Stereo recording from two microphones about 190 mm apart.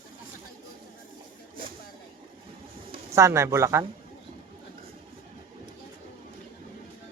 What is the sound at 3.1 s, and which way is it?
Speech, 15° right (ahead or behind).